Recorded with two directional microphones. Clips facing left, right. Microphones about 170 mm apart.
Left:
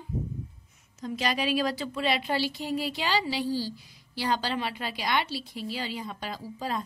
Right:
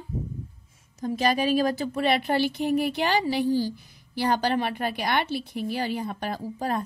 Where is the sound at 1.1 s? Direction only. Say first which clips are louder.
Right 5 dB; 45° right (ahead or behind).